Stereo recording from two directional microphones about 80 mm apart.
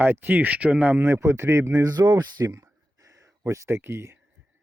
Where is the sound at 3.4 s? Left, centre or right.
Right.